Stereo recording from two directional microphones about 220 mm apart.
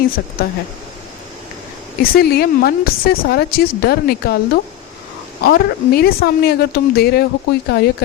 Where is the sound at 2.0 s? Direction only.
45° left (ahead or behind).